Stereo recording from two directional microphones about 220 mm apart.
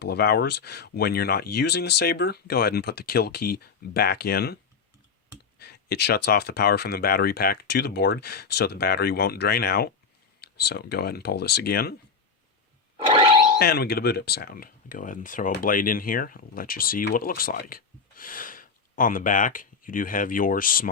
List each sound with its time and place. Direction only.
0.0 s speech: 45° left (ahead or behind)
13.6 s speech: 45° left (ahead or behind)